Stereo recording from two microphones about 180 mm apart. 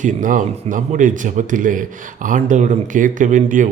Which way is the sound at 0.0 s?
45° right (ahead or behind).